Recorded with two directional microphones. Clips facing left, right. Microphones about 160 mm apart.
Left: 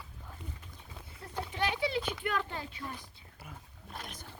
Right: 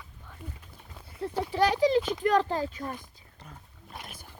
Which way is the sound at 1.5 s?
40° right (ahead or behind).